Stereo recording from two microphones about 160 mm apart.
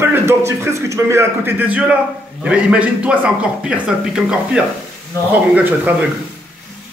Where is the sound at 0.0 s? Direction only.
15° right (ahead or behind).